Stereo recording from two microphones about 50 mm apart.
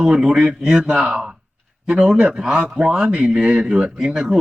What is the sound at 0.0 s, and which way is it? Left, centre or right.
A man's voice, centre.